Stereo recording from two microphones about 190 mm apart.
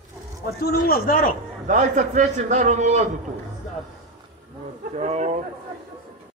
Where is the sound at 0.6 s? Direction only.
50° left (ahead or behind).